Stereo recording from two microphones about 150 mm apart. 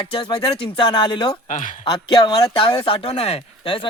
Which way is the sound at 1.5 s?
55° left (ahead or behind).